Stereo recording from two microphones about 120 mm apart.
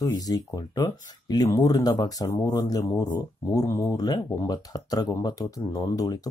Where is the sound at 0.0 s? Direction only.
30° left (ahead or behind).